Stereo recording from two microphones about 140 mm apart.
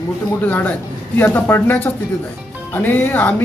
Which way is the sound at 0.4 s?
10° left (ahead or behind).